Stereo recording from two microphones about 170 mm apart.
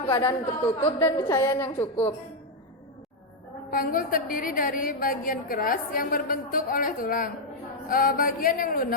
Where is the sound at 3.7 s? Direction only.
55° left (ahead or behind).